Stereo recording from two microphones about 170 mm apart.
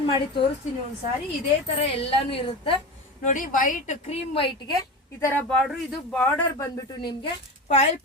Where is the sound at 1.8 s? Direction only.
35° left (ahead or behind).